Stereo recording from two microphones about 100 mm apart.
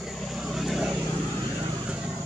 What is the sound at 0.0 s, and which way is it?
Vehicle, centre (ahead or behind).